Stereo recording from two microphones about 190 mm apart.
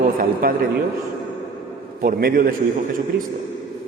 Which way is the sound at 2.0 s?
55° right (ahead or behind).